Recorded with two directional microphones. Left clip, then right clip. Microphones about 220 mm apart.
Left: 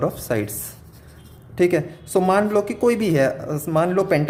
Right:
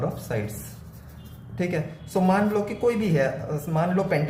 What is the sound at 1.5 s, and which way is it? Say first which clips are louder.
Speech: left 10 dB; 50° left (ahead or behind).